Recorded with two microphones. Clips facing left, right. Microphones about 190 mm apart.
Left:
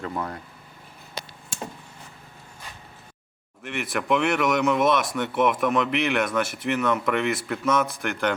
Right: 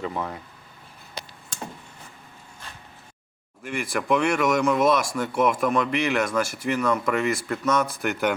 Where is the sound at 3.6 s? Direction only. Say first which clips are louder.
Right 1 dB; centre (ahead or behind).